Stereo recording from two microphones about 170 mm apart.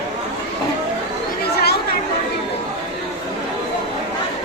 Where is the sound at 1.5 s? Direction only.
70° left (ahead or behind).